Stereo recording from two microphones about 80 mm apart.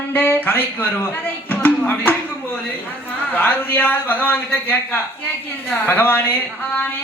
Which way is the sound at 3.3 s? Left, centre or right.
Left.